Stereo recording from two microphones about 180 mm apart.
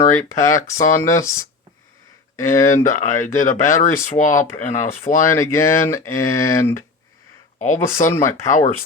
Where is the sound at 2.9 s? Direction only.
45° left (ahead or behind).